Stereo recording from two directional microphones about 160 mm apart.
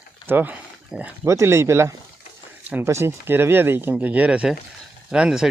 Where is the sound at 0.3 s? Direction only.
10° right (ahead or behind).